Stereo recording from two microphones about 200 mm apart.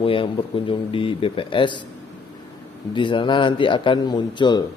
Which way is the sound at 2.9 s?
25° left (ahead or behind).